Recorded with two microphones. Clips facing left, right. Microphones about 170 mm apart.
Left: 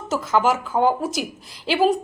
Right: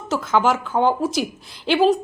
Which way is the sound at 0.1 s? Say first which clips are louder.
Right 1 dB; centre (ahead or behind).